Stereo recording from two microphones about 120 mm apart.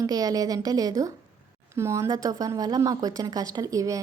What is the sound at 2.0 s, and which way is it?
Speech, 30° right (ahead or behind).